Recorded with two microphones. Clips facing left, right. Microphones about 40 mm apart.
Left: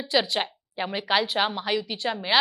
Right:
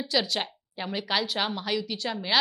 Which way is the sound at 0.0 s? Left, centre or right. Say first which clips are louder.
Left 3 dB; left.